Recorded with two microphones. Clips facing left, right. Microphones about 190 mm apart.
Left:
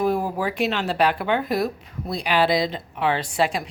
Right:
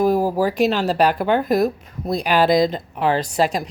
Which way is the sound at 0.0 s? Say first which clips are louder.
Right 5 dB; 40° right (ahead or behind).